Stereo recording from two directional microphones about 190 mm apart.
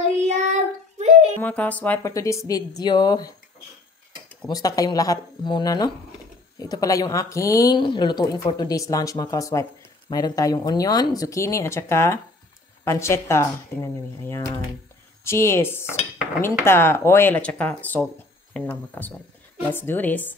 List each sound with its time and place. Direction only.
0.2 s child singing: 35° right (ahead or behind)
0.9 s a sound: 35° right (ahead or behind)
1.4 s speech: 5° left (ahead or behind)
4.5 s speech: 20° left (ahead or behind)